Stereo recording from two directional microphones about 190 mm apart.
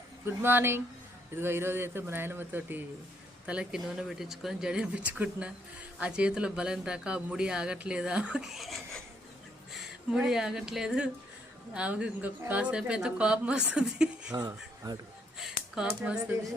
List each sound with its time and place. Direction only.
0.4 s speech: 10° right (ahead or behind)
14.3 s speech: 20° right (ahead or behind)
15.4 s a sound: 5° right (ahead or behind)
16.0 s speech: 5° right (ahead or behind)